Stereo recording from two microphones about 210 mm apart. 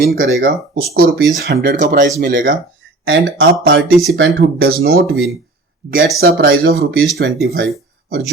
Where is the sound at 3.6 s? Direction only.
50° right (ahead or behind).